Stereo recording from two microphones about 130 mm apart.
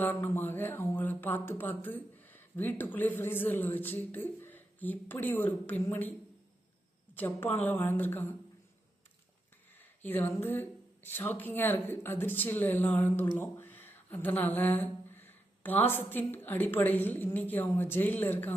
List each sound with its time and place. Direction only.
0.0 s speech: 15° left (ahead or behind)
9.7 s speech: 15° left (ahead or behind)